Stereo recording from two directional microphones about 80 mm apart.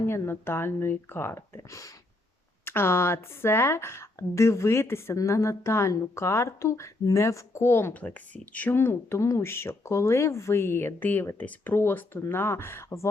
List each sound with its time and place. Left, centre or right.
0.0 s speech: left
8.0 s speech: centre; by 13.1 s left